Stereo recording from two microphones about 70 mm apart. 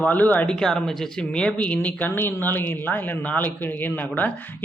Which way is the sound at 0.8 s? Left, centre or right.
Centre.